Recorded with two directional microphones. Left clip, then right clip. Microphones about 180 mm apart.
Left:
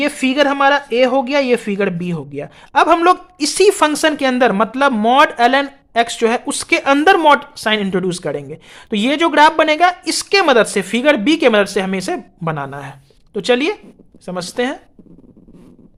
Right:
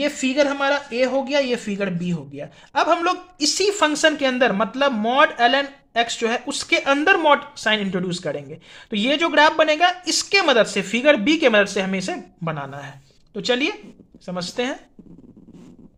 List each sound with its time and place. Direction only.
0.0 s speech: 45° left (ahead or behind)